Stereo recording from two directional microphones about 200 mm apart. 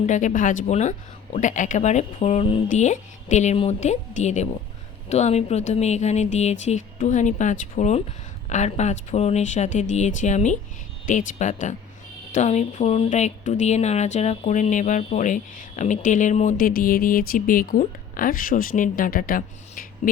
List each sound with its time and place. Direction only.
0.0 s speech: 40° left (ahead or behind)